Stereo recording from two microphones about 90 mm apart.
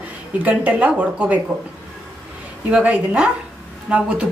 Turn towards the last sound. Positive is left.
turn(degrees=-15)  # may be behind; listen again after turning